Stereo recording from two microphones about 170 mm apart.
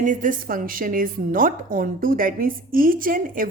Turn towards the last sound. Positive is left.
turn(degrees=-50)  # may be behind; listen again after turning